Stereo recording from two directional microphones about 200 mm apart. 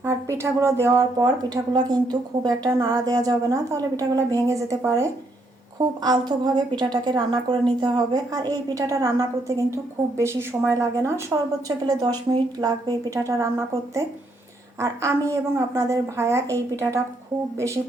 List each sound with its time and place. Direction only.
0.0 s a woman's voice: 15° right (ahead or behind)
11.9 s speech: 20° right (ahead or behind)